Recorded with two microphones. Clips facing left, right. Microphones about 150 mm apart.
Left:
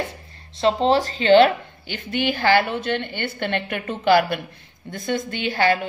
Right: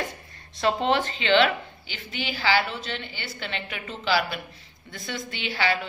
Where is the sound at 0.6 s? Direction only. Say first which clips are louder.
Left 5 dB; 30° left (ahead or behind).